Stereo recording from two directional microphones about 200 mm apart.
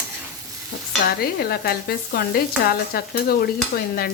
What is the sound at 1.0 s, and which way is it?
Stir, 50° left (ahead or behind).